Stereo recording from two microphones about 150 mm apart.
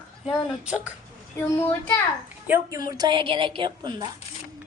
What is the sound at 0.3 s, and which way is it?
Speech, 5° right (ahead or behind).